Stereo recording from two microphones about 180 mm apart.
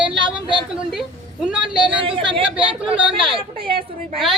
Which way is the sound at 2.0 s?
30° right (ahead or behind).